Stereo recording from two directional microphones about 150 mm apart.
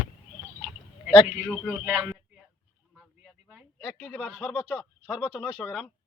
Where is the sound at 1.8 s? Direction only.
15° right (ahead or behind).